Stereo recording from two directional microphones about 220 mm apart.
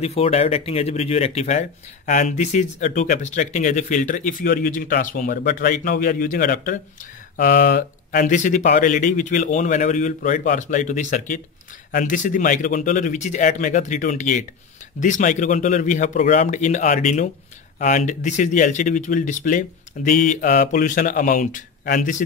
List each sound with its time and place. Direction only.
0.0 s speech: 30° left (ahead or behind)